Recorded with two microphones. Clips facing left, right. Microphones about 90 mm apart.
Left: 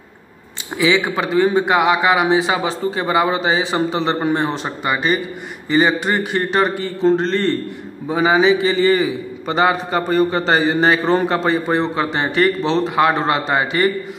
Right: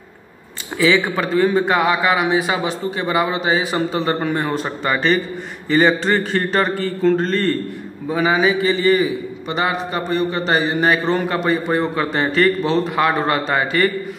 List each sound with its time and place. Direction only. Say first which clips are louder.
0.7 s a man's voice: even; 20° left (ahead or behind)
4.9 s a man's voice: right 2 dB; 15° left (ahead or behind)